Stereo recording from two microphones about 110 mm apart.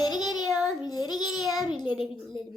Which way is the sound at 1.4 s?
Centre (ahead or behind).